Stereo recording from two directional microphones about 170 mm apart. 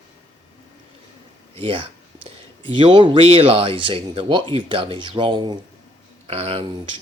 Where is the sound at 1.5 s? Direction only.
30° right (ahead or behind).